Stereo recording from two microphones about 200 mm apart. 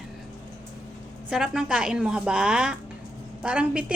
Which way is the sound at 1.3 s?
5° right (ahead or behind).